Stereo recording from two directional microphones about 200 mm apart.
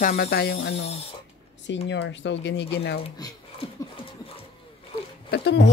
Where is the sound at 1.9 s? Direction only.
65° left (ahead or behind).